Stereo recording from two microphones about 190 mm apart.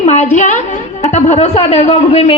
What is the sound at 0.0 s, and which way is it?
A woman's voice, 35° left (ahead or behind).